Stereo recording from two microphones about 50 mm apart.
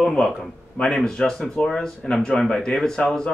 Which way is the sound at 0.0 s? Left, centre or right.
Centre.